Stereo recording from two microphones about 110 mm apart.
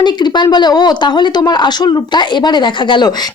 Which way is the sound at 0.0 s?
45° left (ahead or behind).